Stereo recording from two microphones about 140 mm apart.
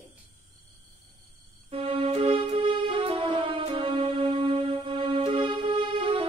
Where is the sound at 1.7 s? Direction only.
40° right (ahead or behind).